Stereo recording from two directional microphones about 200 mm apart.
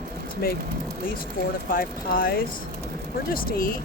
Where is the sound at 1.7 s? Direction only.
45° left (ahead or behind).